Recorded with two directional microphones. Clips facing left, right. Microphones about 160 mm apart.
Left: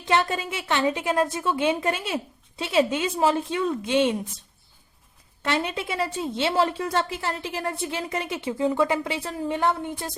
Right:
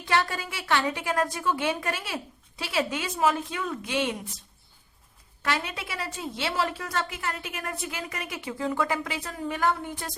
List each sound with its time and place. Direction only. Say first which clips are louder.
0.0 s a woman's voice: left 3 dB; 20° left (ahead or behind)
5.4 s a woman's voice: left 4 dB; 25° left (ahead or behind)